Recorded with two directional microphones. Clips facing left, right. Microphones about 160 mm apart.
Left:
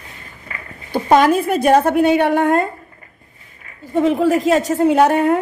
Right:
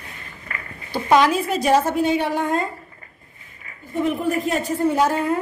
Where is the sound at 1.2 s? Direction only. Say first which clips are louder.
Left 4 dB; 55° left (ahead or behind).